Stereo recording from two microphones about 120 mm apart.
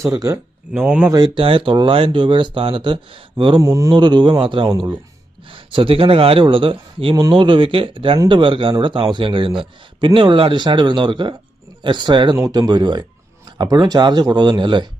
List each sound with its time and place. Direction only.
0.0 s speech: 30° right (ahead or behind)
0.7 s speech: 10° right (ahead or behind)
1.4 s speech: 50° right (ahead or behind)
3.6 s speech: 25° right (ahead or behind)
3.9 s speech: 40° right (ahead or behind)